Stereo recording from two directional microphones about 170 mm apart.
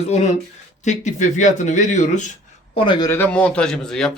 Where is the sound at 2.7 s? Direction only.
30° left (ahead or behind).